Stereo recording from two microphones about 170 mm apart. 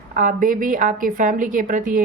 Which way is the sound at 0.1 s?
55° right (ahead or behind).